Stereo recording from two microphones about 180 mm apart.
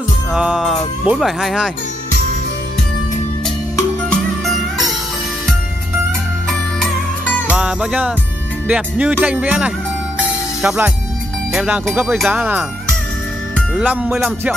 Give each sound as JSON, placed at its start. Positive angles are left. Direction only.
{"t": 0.3, "sound": "speech", "side_deg": -5}
{"t": 7.4, "sound": "speech", "side_deg": -5}
{"t": 8.6, "sound": "music", "side_deg": -5}
{"t": 10.6, "sound": "speech", "side_deg": -5}
{"t": 11.5, "sound": "music", "side_deg": -5}
{"t": 13.6, "sound": "speech", "side_deg": -5}